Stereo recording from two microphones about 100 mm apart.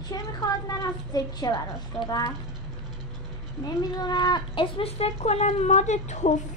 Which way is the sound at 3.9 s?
45° left (ahead or behind).